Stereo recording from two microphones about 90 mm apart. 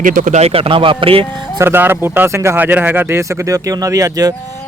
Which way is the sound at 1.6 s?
25° right (ahead or behind).